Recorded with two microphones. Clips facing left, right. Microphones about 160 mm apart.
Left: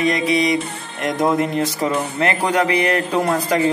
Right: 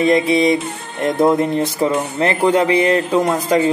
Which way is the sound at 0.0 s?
25° right (ahead or behind).